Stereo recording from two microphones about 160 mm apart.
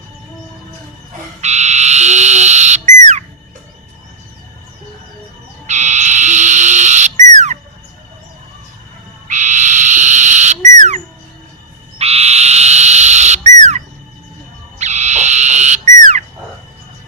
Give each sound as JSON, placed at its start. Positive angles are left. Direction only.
{"t": 1.4, "sound": "frog", "side_deg": -45}
{"t": 5.6, "sound": "frog", "side_deg": -45}
{"t": 9.2, "sound": "owl", "side_deg": -50}
{"t": 10.8, "sound": "squawk", "side_deg": -45}
{"t": 11.9, "sound": "frog", "side_deg": -40}
{"t": 13.6, "sound": "bird", "side_deg": -45}
{"t": 14.8, "sound": "frog", "side_deg": -45}